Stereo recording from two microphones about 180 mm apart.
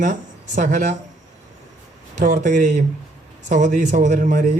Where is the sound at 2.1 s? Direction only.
40° right (ahead or behind).